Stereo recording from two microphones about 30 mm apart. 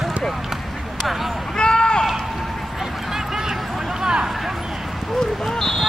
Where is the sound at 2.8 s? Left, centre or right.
Centre.